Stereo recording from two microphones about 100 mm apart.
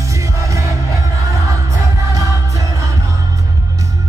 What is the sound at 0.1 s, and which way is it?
Music, 35° right (ahead or behind).